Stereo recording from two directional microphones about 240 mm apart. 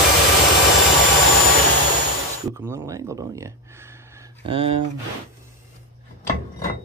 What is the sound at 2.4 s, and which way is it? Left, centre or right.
Speech, centre.